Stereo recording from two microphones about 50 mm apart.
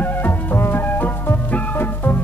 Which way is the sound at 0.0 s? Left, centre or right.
Left.